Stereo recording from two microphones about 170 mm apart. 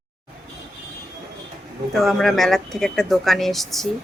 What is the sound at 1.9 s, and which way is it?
A woman's voice, centre (ahead or behind).